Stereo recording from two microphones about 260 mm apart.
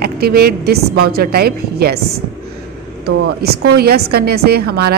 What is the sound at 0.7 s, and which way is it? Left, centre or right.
A woman's voice, right.